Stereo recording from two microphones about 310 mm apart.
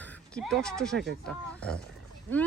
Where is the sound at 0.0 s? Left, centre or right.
Centre.